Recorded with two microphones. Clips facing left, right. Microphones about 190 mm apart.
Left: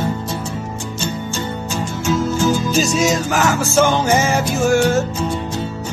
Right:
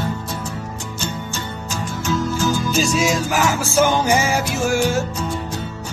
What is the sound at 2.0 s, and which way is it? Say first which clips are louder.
Music: left 3 dB; 20° left (ahead or behind).